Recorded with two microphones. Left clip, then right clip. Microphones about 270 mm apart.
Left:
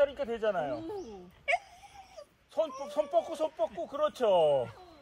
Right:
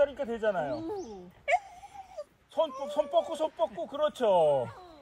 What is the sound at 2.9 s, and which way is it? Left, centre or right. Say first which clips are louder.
Speech: right 1 dB; centre.